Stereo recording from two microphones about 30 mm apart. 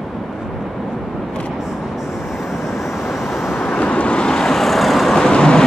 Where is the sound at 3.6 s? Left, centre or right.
Left.